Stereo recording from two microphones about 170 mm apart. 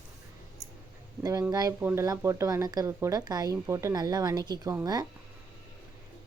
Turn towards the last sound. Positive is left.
turn(degrees=-20)  # may be behind; listen again after turning